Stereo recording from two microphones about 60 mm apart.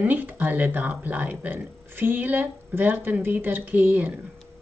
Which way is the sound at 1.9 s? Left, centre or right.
Right.